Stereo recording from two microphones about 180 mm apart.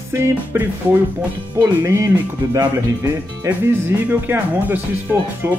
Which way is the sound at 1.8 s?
15° right (ahead or behind).